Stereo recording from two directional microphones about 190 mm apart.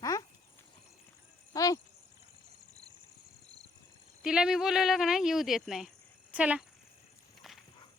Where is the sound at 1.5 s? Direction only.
20° left (ahead or behind).